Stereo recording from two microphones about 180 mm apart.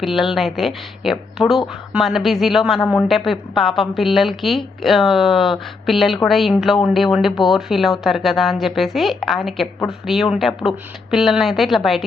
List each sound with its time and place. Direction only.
0.0 s speech: centre (ahead or behind)